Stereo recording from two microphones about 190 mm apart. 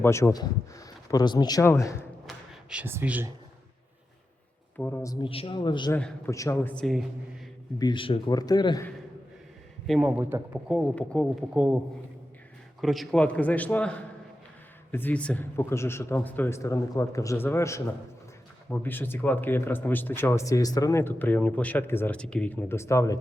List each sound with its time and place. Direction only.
0.0 s speech: 15° left (ahead or behind)
2.2 s a sound: 5° right (ahead or behind)
4.8 s speech: 10° left (ahead or behind)
5.2 s a man's voice: 30° left (ahead or behind)
5.9 s speech: 10° left (ahead or behind)
7.8 s a man's voice: 25° left (ahead or behind)
9.8 s speech: centre (ahead or behind)
10.1 s speech: 10° right (ahead or behind)
10.9 s speech: 5° left (ahead or behind)
12.8 s speech: centre (ahead or behind)